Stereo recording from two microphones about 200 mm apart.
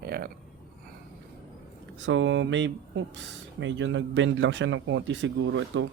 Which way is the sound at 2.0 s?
70° right (ahead or behind).